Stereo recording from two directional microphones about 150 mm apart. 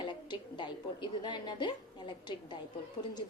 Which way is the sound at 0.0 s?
30° left (ahead or behind).